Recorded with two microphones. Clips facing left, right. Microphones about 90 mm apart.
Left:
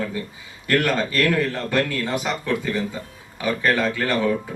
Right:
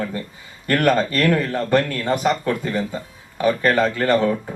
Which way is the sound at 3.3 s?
40° right (ahead or behind).